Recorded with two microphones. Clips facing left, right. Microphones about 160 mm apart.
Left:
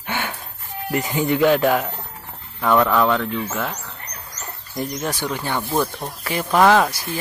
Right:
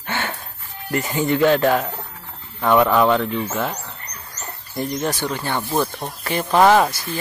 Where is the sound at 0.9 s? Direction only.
15° left (ahead or behind).